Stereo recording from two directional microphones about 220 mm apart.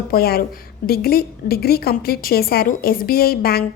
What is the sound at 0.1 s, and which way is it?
A woman's voice, 45° left (ahead or behind).